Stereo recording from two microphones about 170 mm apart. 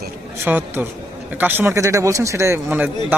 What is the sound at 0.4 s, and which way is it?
Speech, 10° right (ahead or behind).